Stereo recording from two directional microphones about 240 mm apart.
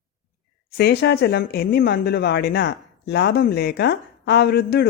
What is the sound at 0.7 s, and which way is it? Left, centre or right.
Speech, left.